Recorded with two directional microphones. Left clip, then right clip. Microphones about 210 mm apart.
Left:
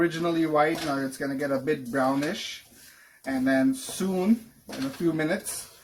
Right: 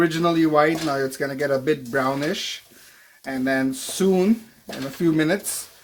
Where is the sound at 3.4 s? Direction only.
50° right (ahead or behind).